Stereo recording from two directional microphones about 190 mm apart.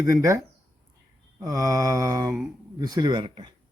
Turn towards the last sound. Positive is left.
turn(degrees=-25)  # may be behind; listen again after turning